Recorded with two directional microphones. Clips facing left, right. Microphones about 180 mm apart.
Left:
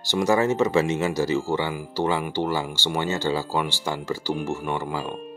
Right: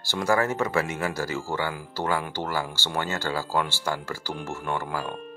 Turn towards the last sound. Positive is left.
turn(degrees=15)  # may be behind; listen again after turning